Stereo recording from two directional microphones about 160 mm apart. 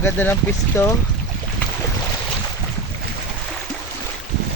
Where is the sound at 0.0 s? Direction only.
10° left (ahead or behind).